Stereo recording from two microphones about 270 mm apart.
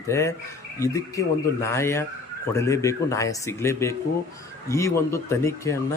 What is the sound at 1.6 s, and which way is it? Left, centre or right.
A man's voice, centre.